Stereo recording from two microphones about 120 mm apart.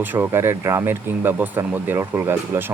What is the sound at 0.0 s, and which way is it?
Speech, 15° right (ahead or behind).